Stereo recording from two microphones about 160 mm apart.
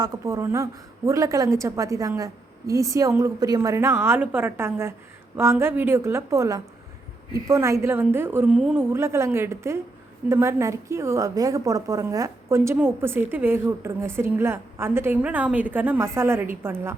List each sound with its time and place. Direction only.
0.0 s a woman's voice: 20° right (ahead or behind)